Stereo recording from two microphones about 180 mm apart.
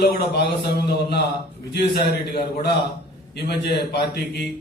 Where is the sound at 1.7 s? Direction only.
60° left (ahead or behind).